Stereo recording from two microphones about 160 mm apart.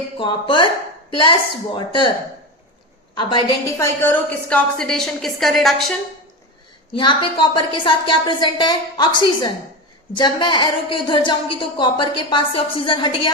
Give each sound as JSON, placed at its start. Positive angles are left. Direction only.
{"t": 0.2, "sound": "a woman's voice", "side_deg": 30}
{"t": 3.2, "sound": "a woman's voice", "side_deg": 30}
{"t": 3.8, "sound": "a woman's voice", "side_deg": 15}
{"t": 6.9, "sound": "a woman's voice", "side_deg": 30}